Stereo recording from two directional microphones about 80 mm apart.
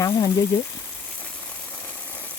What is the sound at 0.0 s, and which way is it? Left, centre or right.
Speech, left.